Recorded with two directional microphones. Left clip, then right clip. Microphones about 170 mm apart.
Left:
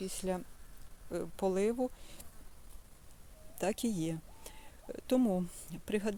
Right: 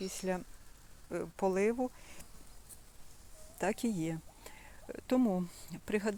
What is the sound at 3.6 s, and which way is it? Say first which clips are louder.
Speech: even; 20° left (ahead or behind).